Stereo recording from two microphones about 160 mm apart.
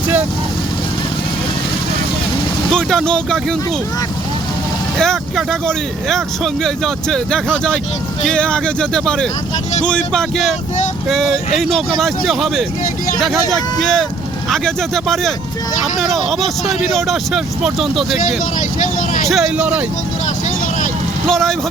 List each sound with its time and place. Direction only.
2.6 s speech: 5° left (ahead or behind)
4.9 s speech: 5° left (ahead or behind)
18.8 s vehicle: 55° left (ahead or behind)
19.3 s a man's voice: 5° right (ahead or behind)
21.2 s speech: 5° left (ahead or behind)